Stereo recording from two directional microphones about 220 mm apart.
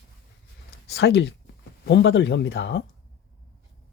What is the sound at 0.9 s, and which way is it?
Speech, 50° left (ahead or behind).